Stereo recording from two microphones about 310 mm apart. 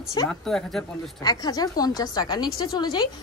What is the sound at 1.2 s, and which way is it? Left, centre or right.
A woman's voice, centre.